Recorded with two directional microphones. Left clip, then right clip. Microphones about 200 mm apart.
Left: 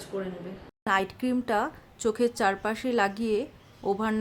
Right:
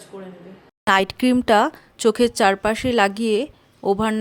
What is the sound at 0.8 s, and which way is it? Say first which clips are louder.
Speech: right 9 dB; 45° right (ahead or behind).